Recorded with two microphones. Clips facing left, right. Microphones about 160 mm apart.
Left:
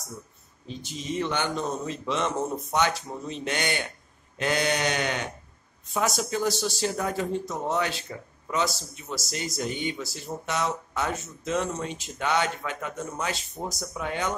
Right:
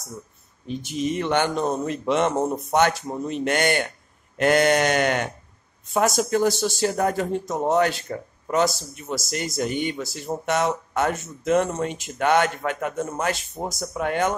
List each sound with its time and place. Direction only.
1.1 s speech: 55° right (ahead or behind)